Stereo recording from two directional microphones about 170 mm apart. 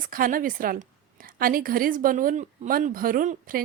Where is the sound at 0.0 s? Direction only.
55° right (ahead or behind).